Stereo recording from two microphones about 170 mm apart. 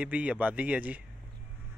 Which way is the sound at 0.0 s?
10° right (ahead or behind).